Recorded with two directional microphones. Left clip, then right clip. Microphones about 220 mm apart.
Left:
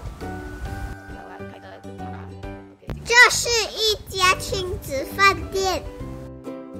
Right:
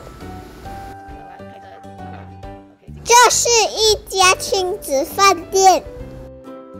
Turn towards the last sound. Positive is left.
turn(degrees=-15)  # may be behind; listen again after turning